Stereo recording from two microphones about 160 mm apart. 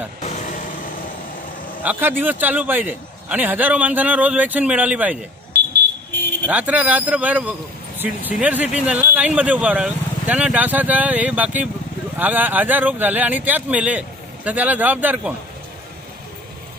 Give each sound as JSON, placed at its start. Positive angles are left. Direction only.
{"t": 0.2, "sound": "vehicle", "side_deg": 50}
{"t": 1.8, "sound": "speech", "side_deg": -10}
{"t": 6.4, "sound": "speech", "side_deg": -10}